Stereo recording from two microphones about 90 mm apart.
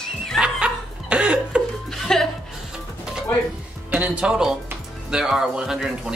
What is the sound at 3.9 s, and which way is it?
Speech, 20° right (ahead or behind).